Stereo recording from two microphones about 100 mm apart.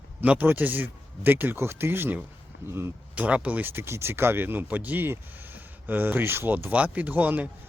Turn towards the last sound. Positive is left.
turn(degrees=-15)  # may be behind; listen again after turning